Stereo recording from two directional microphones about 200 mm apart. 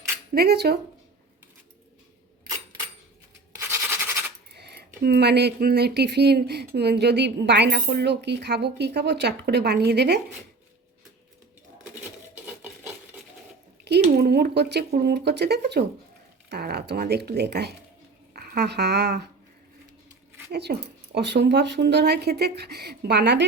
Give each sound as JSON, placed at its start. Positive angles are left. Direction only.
{"t": 0.3, "sound": "speech", "side_deg": -55}
{"t": 3.6, "sound": "a sound", "side_deg": -15}
{"t": 4.5, "sound": "speech", "side_deg": -55}
{"t": 13.8, "sound": "speech", "side_deg": -55}
{"t": 20.5, "sound": "speech", "side_deg": -55}